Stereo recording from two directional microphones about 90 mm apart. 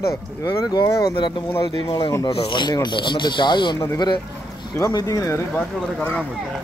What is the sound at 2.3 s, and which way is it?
Speech, 65° left (ahead or behind).